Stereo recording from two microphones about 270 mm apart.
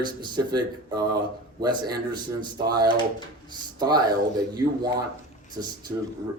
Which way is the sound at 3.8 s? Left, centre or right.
Centre.